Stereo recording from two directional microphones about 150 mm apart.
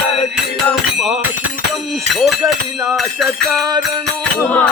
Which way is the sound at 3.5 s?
25° right (ahead or behind).